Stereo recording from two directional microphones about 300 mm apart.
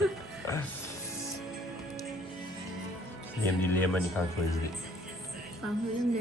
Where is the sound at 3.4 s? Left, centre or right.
Centre.